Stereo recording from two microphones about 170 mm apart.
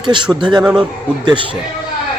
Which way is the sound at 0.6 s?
5° right (ahead or behind).